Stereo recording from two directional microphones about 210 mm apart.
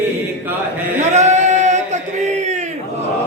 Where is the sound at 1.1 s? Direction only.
35° right (ahead or behind).